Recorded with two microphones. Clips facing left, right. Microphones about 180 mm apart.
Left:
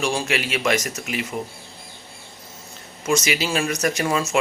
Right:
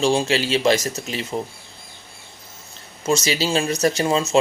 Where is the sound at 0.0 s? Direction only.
25° right (ahead or behind).